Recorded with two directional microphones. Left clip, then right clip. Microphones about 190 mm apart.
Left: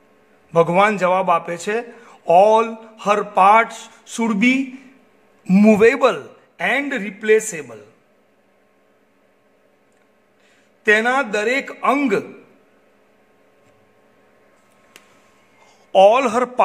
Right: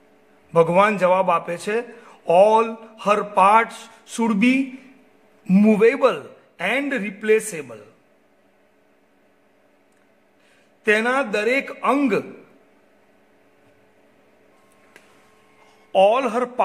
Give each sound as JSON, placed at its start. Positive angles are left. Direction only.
{"t": 0.5, "sound": "a man's voice", "side_deg": 10}
{"t": 10.8, "sound": "a man's voice", "side_deg": 10}
{"t": 15.6, "sound": "a man's voice", "side_deg": 15}